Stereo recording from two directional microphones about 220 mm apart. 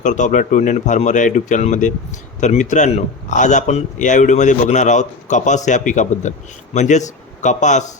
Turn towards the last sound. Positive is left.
turn(degrees=35)  # may be behind; listen again after turning